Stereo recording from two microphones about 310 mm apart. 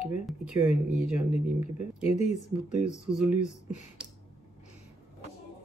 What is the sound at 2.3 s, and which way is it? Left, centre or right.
Speech, left.